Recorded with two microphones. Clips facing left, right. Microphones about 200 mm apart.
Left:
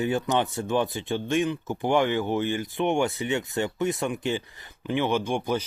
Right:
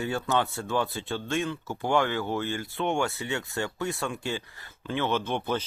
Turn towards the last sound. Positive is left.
turn(degrees=10)  # may be behind; listen again after turning